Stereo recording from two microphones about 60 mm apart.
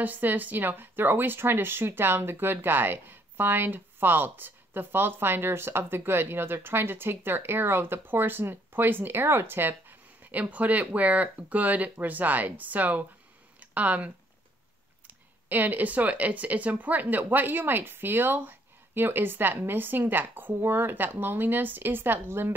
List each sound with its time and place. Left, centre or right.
0.0 s speech: right
15.4 s speech: right